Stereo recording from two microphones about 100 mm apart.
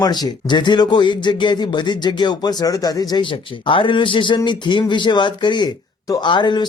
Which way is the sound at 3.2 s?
60° left (ahead or behind).